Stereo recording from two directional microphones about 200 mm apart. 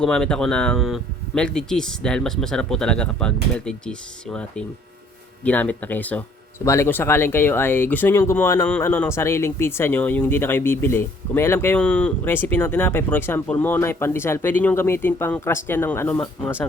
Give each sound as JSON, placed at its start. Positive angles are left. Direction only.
{"t": 0.0, "sound": "speech", "side_deg": 5}